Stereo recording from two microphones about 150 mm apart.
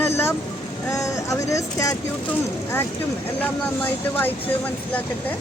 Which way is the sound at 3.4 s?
10° left (ahead or behind).